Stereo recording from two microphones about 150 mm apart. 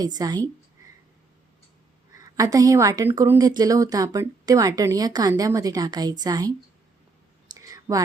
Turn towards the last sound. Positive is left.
turn(degrees=-20)  # may be behind; listen again after turning